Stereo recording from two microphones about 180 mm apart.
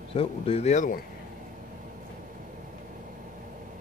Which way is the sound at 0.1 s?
30° left (ahead or behind).